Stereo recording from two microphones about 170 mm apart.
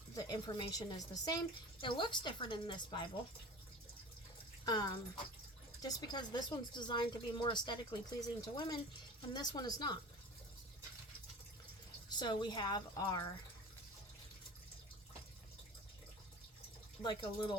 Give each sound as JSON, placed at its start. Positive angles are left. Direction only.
{"t": 0.2, "sound": "speech", "side_deg": 25}
{"t": 4.6, "sound": "speech", "side_deg": 25}
{"t": 12.0, "sound": "speech", "side_deg": 25}
{"t": 17.0, "sound": "speech", "side_deg": 30}